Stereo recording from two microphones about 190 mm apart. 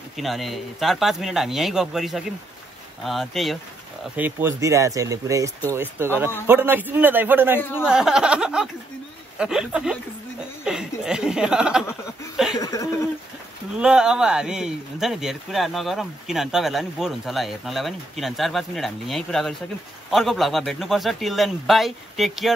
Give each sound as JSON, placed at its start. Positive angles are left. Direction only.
{"t": 0.2, "sound": "speech", "side_deg": 0}
{"t": 4.2, "sound": "speech", "side_deg": -15}
{"t": 12.5, "sound": "speech", "side_deg": 20}
{"t": 13.7, "sound": "speech", "side_deg": -5}